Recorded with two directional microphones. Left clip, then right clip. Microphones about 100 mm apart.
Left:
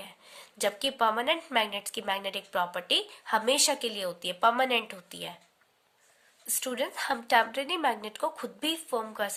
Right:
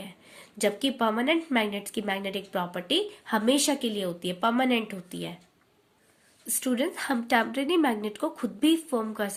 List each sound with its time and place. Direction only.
0.0 s a woman's voice: 25° left (ahead or behind)
6.4 s a woman's voice: 20° left (ahead or behind)